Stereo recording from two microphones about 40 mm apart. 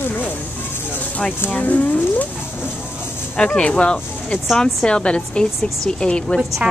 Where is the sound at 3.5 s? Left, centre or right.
Left.